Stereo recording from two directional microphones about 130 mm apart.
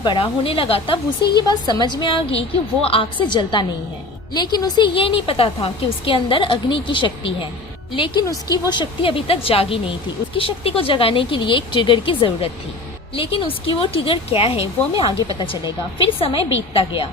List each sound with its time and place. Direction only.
0.0 s a woman's voice: 40° left (ahead or behind)
8.3 s a woman's voice: 30° left (ahead or behind)